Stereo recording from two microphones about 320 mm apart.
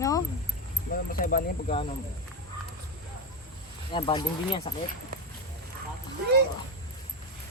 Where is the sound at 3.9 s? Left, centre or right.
Centre.